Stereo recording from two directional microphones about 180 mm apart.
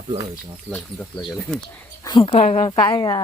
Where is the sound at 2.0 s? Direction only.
30° left (ahead or behind).